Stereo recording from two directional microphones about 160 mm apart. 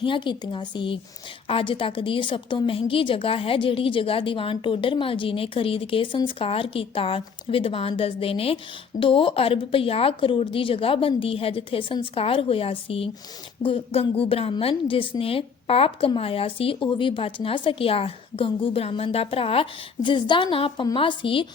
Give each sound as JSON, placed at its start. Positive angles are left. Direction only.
{"t": 0.0, "sound": "a woman's voice", "side_deg": 30}